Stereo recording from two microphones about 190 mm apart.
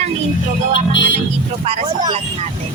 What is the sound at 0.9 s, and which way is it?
Music, 70° left (ahead or behind).